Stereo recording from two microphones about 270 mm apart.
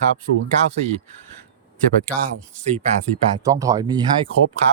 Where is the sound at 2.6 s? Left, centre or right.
Right.